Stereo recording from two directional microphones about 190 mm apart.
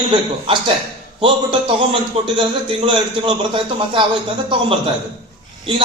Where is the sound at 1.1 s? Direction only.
25° right (ahead or behind).